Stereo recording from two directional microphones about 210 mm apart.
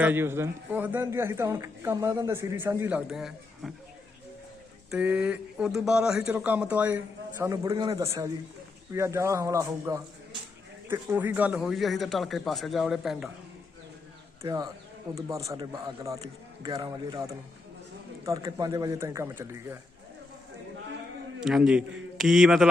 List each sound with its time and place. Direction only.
0.0 s a man's voice: 10° right (ahead or behind)
4.9 s a man's voice: 5° right (ahead or behind)
14.4 s a man's voice: 20° right (ahead or behind)
21.4 s a man's voice: 5° right (ahead or behind)